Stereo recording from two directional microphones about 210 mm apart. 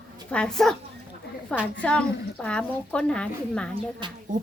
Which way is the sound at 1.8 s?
5° left (ahead or behind).